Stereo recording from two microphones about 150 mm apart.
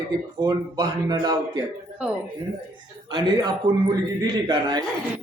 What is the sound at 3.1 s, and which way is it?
A man's voice, 30° right (ahead or behind).